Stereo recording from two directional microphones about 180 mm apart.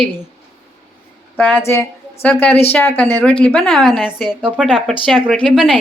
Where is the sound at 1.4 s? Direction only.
10° left (ahead or behind).